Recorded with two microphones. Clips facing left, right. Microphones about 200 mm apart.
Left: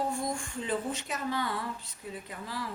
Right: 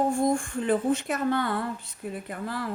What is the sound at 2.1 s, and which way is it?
Speech, 55° right (ahead or behind).